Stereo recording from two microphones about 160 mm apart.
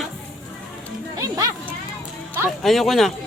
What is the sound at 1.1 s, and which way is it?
Music, 20° right (ahead or behind).